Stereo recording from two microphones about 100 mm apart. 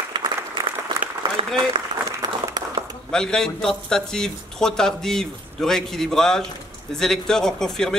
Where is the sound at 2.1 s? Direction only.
35° right (ahead or behind).